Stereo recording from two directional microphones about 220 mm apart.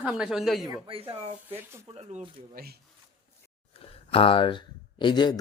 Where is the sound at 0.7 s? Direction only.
25° right (ahead or behind).